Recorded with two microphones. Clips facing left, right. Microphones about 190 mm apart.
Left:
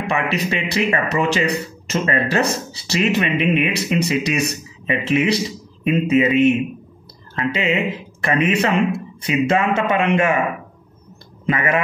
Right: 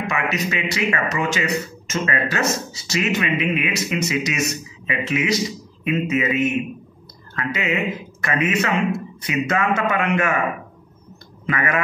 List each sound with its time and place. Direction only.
0.0 s a man's voice: 30° left (ahead or behind)
11.4 s a man's voice: 25° left (ahead or behind)